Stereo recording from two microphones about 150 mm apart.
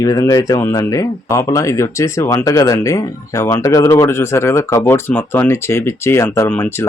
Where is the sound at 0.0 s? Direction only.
25° left (ahead or behind).